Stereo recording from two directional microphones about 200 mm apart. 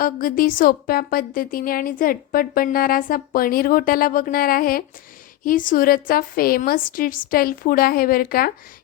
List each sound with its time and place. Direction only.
0.0 s a woman's voice: 45° left (ahead or behind)